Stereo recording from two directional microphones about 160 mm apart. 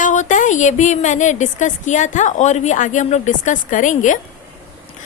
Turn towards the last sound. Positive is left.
turn(degrees=50)  # may be behind; listen again after turning